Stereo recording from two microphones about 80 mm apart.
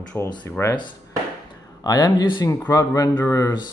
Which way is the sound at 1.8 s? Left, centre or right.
Left.